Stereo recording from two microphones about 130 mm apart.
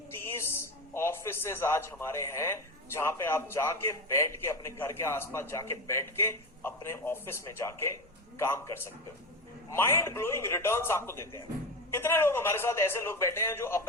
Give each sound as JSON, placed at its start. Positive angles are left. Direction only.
{"t": 0.1, "sound": "a man's voice", "side_deg": 20}